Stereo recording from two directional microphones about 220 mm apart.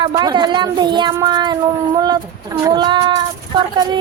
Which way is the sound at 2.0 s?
20° right (ahead or behind).